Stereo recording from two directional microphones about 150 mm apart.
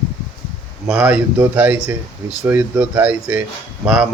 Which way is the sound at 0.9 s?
5° right (ahead or behind).